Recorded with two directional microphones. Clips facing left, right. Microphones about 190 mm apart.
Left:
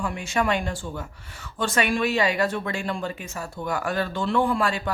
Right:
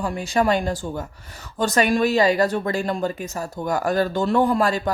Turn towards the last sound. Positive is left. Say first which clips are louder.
# right 4 dB
turn(degrees=-40)  # may be behind; listen again after turning